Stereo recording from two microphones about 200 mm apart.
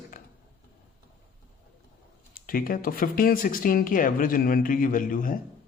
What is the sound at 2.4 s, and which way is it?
A man's voice, 45° left (ahead or behind).